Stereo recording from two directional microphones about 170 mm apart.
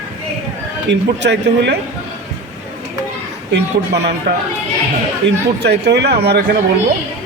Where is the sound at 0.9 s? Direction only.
90° right.